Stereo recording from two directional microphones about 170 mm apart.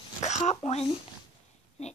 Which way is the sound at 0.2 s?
40° left (ahead or behind).